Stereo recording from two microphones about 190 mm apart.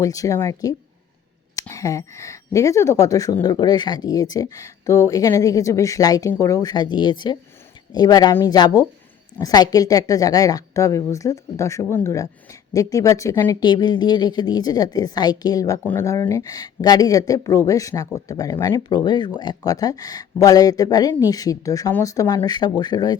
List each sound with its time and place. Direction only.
0.0 s speech: 15° left (ahead or behind)